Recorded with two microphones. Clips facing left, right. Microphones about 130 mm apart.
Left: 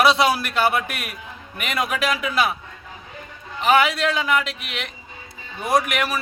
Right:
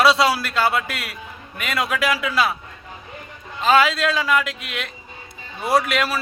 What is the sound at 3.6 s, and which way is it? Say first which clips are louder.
A man's voice: right 1 dB; 20° left (ahead or behind).